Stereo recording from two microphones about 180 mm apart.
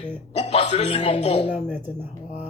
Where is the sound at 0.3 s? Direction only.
35° left (ahead or behind).